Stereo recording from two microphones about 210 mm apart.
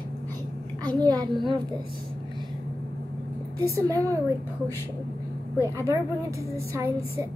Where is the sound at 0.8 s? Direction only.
20° right (ahead or behind).